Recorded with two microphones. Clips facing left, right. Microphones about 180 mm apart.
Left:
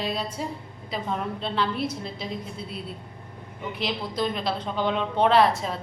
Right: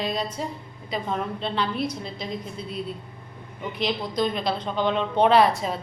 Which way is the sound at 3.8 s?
5° left (ahead or behind).